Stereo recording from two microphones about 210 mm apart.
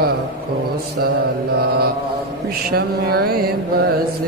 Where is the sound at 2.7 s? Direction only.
45° right (ahead or behind).